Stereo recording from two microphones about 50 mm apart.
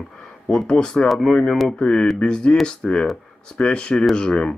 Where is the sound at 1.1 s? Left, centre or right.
Centre.